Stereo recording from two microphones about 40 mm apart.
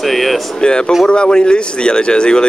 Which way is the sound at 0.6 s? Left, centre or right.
Left.